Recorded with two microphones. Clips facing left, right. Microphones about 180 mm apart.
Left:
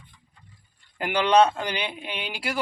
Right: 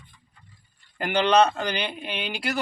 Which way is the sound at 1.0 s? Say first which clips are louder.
Even; 10° left (ahead or behind).